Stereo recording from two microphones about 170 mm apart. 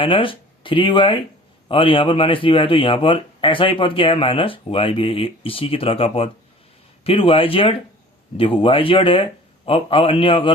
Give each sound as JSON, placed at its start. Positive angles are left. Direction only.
{"t": 0.0, "sound": "speech", "side_deg": 30}